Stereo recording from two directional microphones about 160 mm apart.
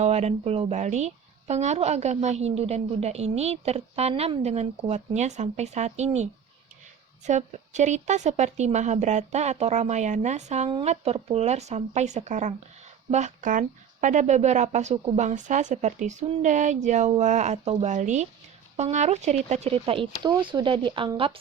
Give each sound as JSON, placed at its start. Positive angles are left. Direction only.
{"t": 0.0, "sound": "speech", "side_deg": -45}
{"t": 7.3, "sound": "speech", "side_deg": -45}